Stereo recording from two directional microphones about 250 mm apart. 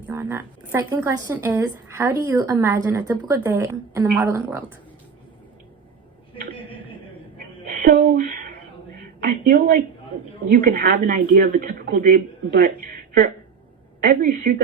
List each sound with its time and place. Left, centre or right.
0.1 s speech: centre
7.7 s a sound: right
9.2 s speech: right
14.0 s speech: right